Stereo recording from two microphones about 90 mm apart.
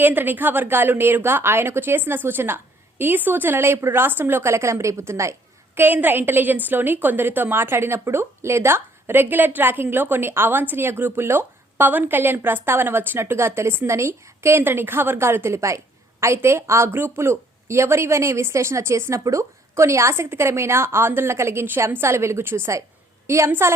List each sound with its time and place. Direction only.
0.0 s a woman's voice: 20° right (ahead or behind)
5.7 s a woman's voice: 20° right (ahead or behind)